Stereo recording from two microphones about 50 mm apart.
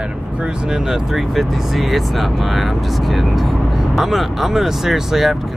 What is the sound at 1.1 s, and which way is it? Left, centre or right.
Speech, centre.